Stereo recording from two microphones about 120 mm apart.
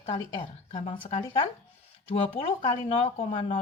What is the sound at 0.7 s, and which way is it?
Speech, 45° left (ahead or behind).